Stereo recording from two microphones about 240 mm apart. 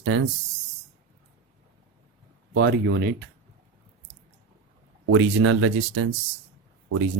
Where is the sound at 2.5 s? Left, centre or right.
Right.